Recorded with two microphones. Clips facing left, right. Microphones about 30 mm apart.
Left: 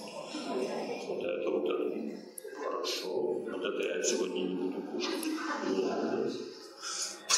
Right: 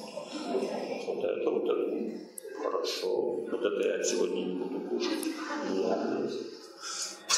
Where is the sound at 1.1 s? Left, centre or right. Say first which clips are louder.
Right 3 dB; centre.